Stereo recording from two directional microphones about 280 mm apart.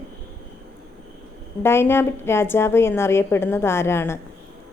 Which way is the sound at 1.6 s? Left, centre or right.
Centre.